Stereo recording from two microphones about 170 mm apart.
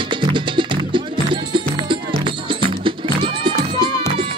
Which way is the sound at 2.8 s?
30° right (ahead or behind).